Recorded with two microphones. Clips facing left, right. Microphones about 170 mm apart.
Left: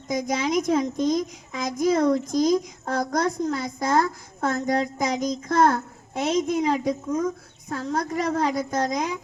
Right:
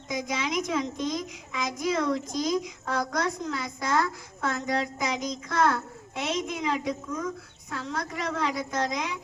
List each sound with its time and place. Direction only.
0.1 s a woman's voice: 45° left (ahead or behind)